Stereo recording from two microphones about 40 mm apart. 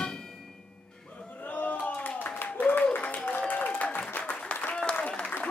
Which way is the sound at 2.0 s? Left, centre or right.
Left.